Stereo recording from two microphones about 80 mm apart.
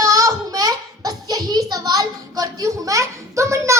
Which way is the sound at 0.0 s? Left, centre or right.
Right.